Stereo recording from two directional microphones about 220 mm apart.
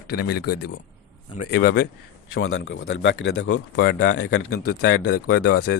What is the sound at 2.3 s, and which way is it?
Speech, 65° left (ahead or behind).